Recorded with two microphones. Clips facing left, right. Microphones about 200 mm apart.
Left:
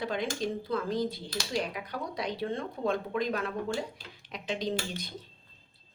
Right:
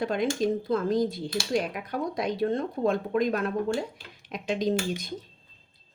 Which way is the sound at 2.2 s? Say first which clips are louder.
Right 6 dB; 50° right (ahead or behind).